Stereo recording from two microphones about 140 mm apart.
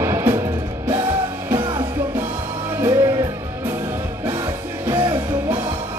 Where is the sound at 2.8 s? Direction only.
25° right (ahead or behind).